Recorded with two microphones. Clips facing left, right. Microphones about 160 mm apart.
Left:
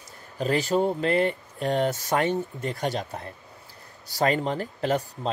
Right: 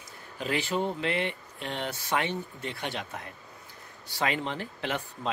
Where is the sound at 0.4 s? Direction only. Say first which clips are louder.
Left 6 dB; 40° left (ahead or behind).